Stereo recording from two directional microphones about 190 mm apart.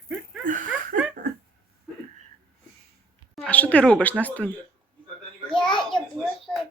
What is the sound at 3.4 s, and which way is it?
Speech, 10° left (ahead or behind).